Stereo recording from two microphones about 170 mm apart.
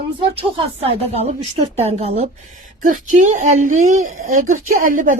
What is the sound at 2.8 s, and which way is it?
A woman's voice, 50° right (ahead or behind).